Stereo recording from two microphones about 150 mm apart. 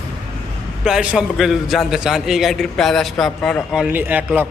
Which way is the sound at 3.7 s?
10° right (ahead or behind).